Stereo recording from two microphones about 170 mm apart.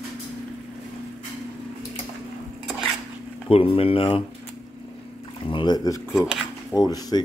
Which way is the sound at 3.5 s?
35° left (ahead or behind).